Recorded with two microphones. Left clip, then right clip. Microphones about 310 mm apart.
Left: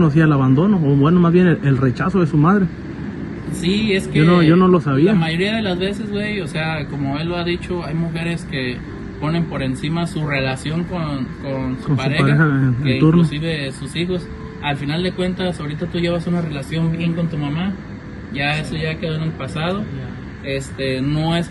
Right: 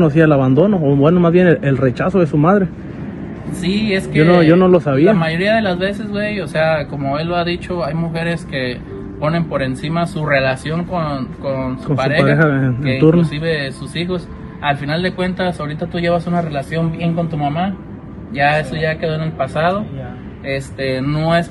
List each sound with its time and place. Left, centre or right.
0.0 s a man's voice: centre
3.5 s a man's voice: centre
4.6 s a man's voice: centre
5.0 s a man's voice: centre